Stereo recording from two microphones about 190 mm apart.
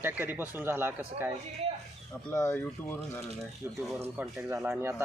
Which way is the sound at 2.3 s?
15° left (ahead or behind).